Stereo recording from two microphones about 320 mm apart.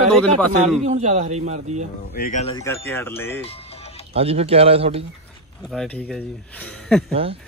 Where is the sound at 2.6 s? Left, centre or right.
Centre.